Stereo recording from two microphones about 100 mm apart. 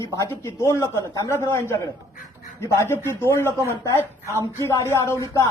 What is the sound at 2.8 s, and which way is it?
Speech, 25° left (ahead or behind).